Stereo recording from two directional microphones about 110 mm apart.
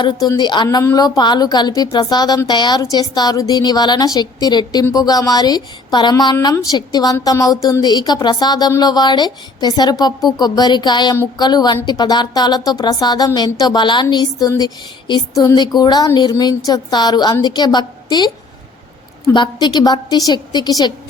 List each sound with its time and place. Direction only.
0.0 s speech: 40° left (ahead or behind)
0.8 s speech: 35° left (ahead or behind)
19.3 s speech: 45° left (ahead or behind)